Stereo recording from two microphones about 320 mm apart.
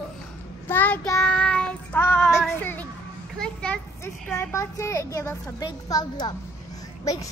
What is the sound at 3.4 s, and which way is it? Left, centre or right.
A child's voice, centre.